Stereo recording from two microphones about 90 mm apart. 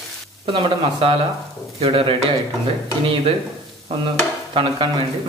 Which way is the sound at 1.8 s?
80° right.